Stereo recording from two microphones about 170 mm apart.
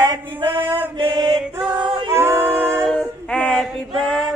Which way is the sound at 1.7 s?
25° right (ahead or behind).